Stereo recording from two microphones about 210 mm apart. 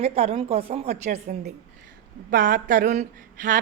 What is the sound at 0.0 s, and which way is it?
A woman's voice, 30° right (ahead or behind).